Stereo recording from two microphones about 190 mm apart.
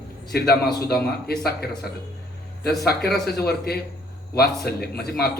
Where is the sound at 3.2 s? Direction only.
55° left (ahead or behind).